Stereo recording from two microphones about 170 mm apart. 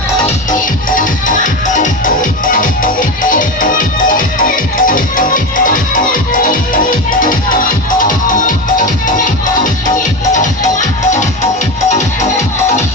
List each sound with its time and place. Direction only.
0.3 s music: 50° left (ahead or behind)
10.3 s music: 45° left (ahead or behind)